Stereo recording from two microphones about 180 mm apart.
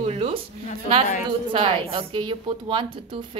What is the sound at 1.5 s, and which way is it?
A woman's voice, 30° right (ahead or behind).